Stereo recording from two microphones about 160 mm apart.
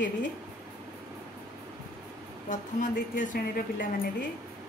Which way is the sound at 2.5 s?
50° left (ahead or behind).